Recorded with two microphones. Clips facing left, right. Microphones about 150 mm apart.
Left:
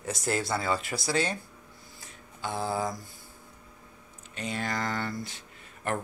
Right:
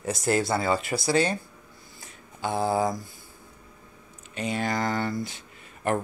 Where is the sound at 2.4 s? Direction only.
15° right (ahead or behind).